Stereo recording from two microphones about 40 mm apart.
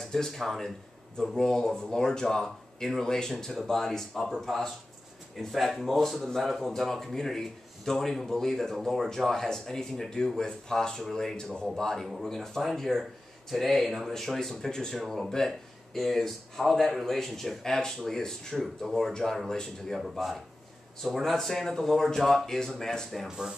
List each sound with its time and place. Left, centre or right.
0.0 s speech: centre
6.4 s speech: centre
15.0 s speech: centre
18.6 s speech: centre
23.2 s speech: centre